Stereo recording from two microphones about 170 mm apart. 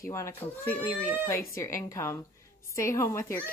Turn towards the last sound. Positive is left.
turn(degrees=15)  # may be behind; listen again after turning